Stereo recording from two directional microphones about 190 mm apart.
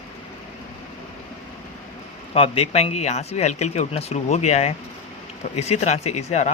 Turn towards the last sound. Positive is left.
turn(degrees=35)  # may be behind; listen again after turning